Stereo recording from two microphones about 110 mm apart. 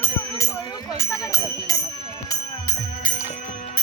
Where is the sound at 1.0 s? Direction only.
30° left (ahead or behind).